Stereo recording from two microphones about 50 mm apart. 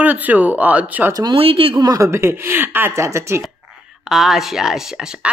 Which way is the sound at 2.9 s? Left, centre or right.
Right.